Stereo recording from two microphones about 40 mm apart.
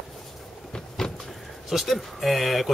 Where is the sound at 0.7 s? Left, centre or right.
Centre.